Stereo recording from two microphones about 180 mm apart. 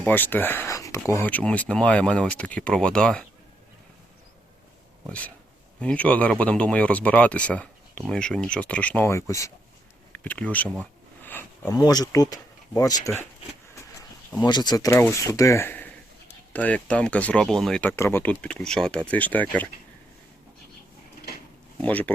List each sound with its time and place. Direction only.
0.0 s speech: 10° left (ahead or behind)
5.8 s speech: 5° left (ahead or behind)
14.4 s speech: 25° left (ahead or behind)
21.8 s speech: 10° left (ahead or behind)